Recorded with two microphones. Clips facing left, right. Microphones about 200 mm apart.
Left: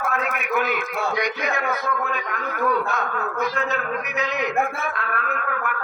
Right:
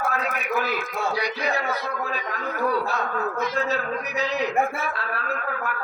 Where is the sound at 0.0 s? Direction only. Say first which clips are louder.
Left 1 dB; 35° right (ahead or behind).